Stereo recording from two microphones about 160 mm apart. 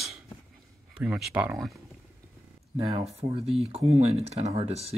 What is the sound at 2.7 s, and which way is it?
Speech, 35° right (ahead or behind).